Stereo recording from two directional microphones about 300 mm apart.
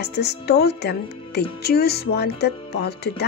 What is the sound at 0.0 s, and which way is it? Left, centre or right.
Speech, left.